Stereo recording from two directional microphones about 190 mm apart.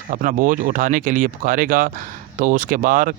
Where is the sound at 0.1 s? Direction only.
45° right (ahead or behind).